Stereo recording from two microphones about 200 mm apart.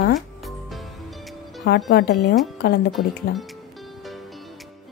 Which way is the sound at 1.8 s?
55° left (ahead or behind).